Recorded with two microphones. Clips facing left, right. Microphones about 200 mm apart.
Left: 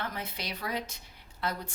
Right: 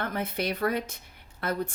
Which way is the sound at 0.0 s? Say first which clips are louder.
Right 7 dB; 55° right (ahead or behind).